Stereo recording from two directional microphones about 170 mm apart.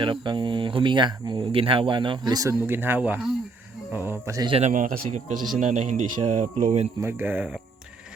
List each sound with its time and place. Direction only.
0.0 s speech: 30° right (ahead or behind)
4.4 s speech: 35° right (ahead or behind)
4.7 s speech: 55° right (ahead or behind)
7.0 s speech: 15° right (ahead or behind)